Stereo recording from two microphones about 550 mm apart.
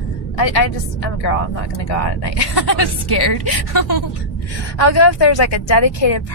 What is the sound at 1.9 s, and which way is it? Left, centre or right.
A woman's voice, left.